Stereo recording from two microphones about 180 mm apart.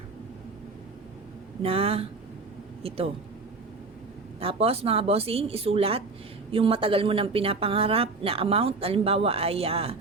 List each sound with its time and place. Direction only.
1.6 s a woman's voice: 30° right (ahead or behind)
4.4 s a woman's voice: 30° right (ahead or behind)